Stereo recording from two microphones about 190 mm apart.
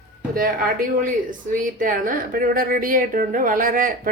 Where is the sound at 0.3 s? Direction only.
45° right (ahead or behind).